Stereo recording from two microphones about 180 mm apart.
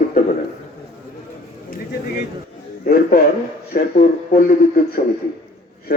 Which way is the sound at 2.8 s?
55° left (ahead or behind).